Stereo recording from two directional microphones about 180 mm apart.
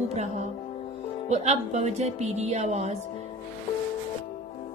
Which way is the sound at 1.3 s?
40° right (ahead or behind).